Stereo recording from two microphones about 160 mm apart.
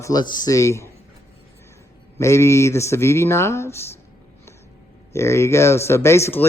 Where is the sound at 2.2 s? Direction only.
15° left (ahead or behind).